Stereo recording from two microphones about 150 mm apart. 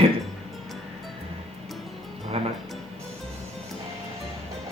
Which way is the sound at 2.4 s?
40° right (ahead or behind).